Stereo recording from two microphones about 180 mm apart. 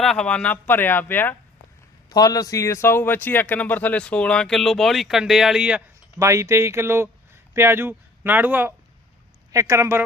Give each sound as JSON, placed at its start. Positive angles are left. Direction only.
{"t": 0.0, "sound": "a man's voice", "side_deg": 5}
{"t": 2.0, "sound": "a man's voice", "side_deg": 20}
{"t": 6.1, "sound": "speech", "side_deg": -15}